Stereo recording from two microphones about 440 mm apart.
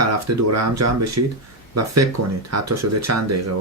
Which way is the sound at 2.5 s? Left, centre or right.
Right.